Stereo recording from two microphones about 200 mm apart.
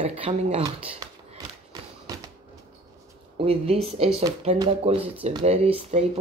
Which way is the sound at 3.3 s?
30° right (ahead or behind).